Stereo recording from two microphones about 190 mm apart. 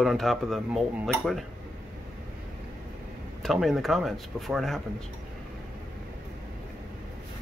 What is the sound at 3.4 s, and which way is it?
Speech, centre (ahead or behind).